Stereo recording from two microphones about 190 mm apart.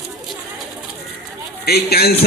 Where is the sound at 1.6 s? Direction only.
55° left (ahead or behind).